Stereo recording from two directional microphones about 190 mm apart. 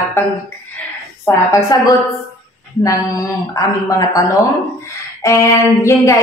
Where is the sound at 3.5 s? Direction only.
20° left (ahead or behind).